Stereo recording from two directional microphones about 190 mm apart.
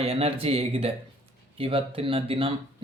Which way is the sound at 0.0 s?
30° right (ahead or behind).